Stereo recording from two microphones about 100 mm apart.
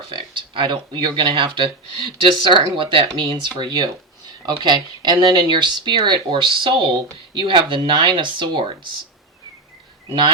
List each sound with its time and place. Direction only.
0.2 s speech: 50° right (ahead or behind)